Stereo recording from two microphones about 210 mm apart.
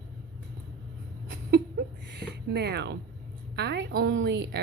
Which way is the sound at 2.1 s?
50° right (ahead or behind).